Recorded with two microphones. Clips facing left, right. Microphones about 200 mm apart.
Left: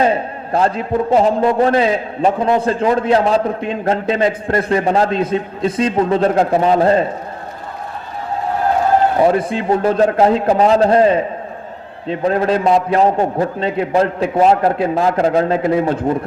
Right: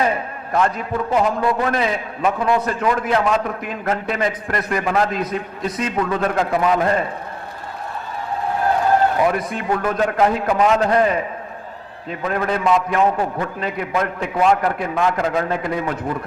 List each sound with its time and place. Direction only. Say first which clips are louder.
0.0 s a man's voice: left 5 dB; 30° left (ahead or behind)
9.1 s a man's voice: left 5 dB; 30° left (ahead or behind)